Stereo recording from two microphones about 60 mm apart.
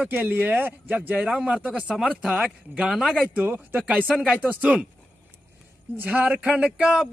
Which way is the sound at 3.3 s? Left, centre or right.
Right.